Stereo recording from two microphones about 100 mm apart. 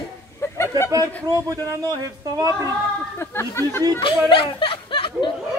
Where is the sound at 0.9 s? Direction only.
35° right (ahead or behind).